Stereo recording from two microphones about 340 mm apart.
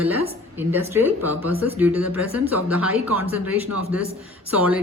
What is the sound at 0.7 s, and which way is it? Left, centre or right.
Speech, centre.